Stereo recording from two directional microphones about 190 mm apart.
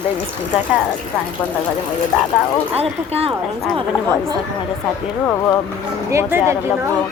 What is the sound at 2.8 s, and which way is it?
Speech, 30° right (ahead or behind).